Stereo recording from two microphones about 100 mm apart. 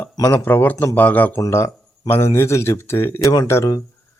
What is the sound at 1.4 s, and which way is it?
Speech, 30° left (ahead or behind).